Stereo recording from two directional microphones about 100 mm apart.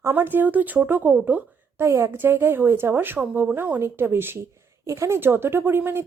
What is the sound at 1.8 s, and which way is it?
A woman's voice, 25° right (ahead or behind).